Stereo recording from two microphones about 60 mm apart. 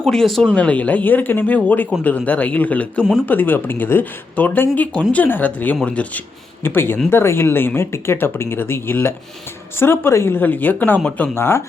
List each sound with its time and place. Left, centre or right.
0.0 s speech: centre
0.5 s speech: left
6.6 s speech: left
10.4 s speech: left
11.3 s speech: left